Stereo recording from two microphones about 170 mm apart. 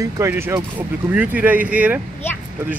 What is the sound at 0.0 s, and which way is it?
Speech, 15° right (ahead or behind).